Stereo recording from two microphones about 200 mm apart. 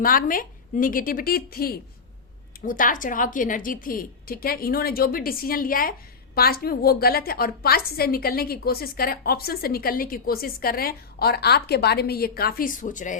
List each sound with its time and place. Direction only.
0.0 s a woman's voice: 45° left (ahead or behind)